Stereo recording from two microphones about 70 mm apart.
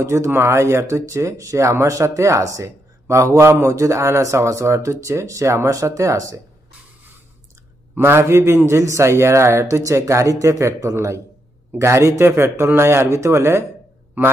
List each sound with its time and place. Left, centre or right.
0.0 s speech: right
8.0 s speech: right
14.2 s a man's voice: right